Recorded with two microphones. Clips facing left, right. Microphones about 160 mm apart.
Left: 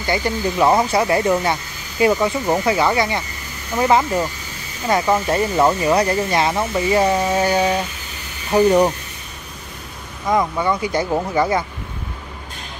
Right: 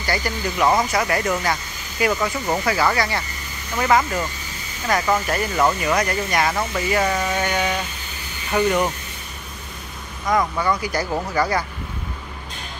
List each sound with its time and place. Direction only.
0.0 s speech: 25° left (ahead or behind)
10.2 s speech: 25° left (ahead or behind)